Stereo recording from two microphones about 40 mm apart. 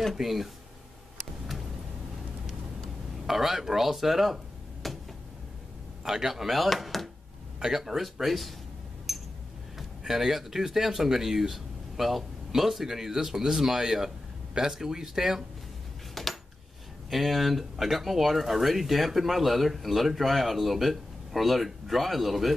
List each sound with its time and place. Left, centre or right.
0.1 s speech: centre
3.3 s speech: centre
4.8 s a sound: centre
6.0 s speech: centre
9.1 s a sound: centre
9.8 s speech: centre
16.2 s coin: centre
17.1 s speech: centre